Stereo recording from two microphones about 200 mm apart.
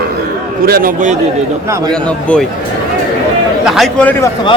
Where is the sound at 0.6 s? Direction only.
45° right (ahead or behind).